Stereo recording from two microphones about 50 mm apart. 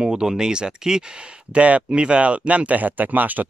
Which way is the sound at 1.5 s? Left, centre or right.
Right.